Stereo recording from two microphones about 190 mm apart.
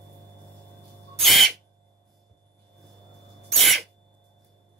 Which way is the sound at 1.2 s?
Centre (ahead or behind).